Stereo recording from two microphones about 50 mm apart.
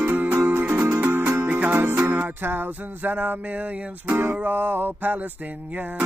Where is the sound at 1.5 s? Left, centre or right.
Right.